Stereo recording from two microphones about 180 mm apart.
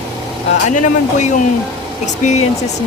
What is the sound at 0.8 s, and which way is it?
Speech, 45° left (ahead or behind).